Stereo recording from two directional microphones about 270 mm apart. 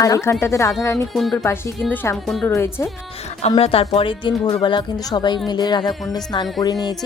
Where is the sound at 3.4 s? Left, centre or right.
Left.